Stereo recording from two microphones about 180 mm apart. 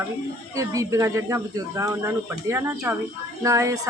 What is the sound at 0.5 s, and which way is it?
Speech, 20° right (ahead or behind).